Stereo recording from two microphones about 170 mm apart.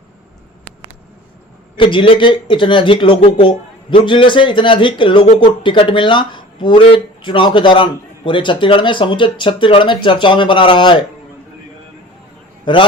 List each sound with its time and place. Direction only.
1.8 s speech: 30° left (ahead or behind)
12.7 s speech: 30° left (ahead or behind)